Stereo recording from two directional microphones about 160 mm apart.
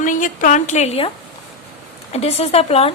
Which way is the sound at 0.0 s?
55° left (ahead or behind).